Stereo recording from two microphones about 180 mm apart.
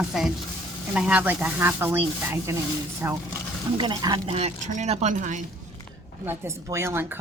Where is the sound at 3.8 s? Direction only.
25° right (ahead or behind); by 5.4 s 45° right (ahead or behind).